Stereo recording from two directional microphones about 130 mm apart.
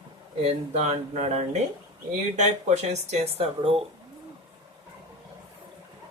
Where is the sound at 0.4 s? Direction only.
55° right (ahead or behind).